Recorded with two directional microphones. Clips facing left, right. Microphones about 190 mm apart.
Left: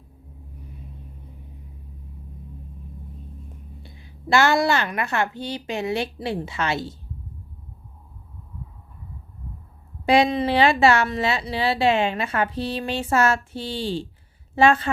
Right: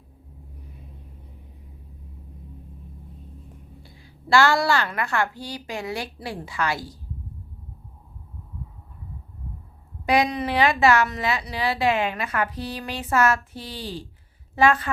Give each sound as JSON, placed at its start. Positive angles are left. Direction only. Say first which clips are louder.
{"t": 3.8, "sound": "a woman's voice", "louder": "left 1 dB", "side_deg": 20}
{"t": 10.1, "sound": "a woman's voice", "louder": "left 3 dB", "side_deg": 30}